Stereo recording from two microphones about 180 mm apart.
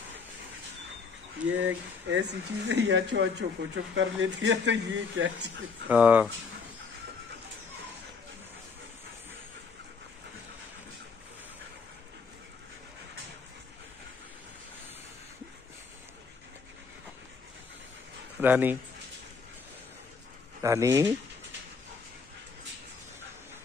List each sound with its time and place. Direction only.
1.6 s speech: 90° right
5.9 s speech: 10° right (ahead or behind)
18.4 s speech: 10° right (ahead or behind)
20.6 s speech: 15° right (ahead or behind)